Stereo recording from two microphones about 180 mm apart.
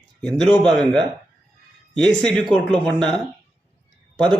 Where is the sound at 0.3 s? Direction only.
5° left (ahead or behind).